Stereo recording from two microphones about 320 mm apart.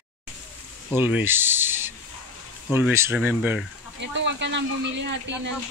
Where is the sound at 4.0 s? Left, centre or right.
Right.